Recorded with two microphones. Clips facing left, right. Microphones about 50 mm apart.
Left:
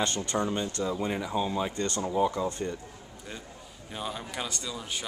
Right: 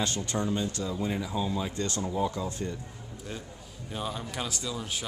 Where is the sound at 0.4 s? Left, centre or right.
Left.